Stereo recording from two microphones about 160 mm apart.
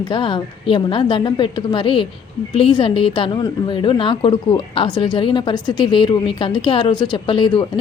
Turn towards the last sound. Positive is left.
turn(degrees=30)  # may be behind; listen again after turning